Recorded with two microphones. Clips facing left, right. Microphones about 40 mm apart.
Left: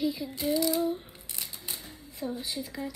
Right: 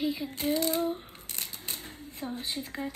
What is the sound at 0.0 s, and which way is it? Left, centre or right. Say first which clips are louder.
Child singing: even; right.